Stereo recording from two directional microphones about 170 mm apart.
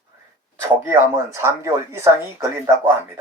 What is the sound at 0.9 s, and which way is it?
A man's voice, 15° right (ahead or behind).